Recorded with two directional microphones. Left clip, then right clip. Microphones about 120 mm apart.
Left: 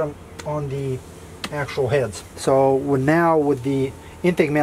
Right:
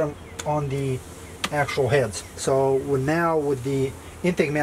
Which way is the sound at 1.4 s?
Centre (ahead or behind).